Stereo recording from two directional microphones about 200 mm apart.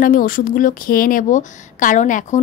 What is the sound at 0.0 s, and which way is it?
A woman's voice, 45° left (ahead or behind).